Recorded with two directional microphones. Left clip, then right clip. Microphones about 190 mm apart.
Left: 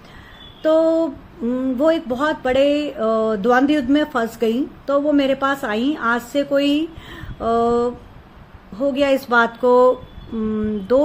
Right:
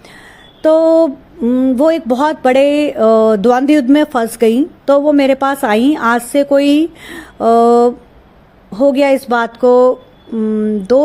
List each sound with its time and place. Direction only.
0.6 s speech: 40° right (ahead or behind)
10.4 s speech: 20° right (ahead or behind)